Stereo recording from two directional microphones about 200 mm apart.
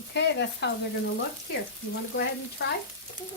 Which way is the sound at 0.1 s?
60° left (ahead or behind).